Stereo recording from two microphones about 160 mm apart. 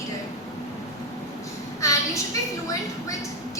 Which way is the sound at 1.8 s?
20° left (ahead or behind).